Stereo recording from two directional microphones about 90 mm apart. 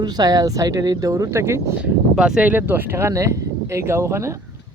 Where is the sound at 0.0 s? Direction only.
50° right (ahead or behind); by 1.7 s 35° right (ahead or behind).